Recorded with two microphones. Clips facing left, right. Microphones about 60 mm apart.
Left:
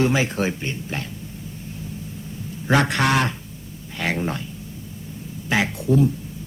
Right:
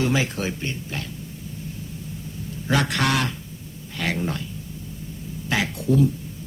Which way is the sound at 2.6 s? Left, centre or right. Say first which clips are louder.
Left 3 dB; left.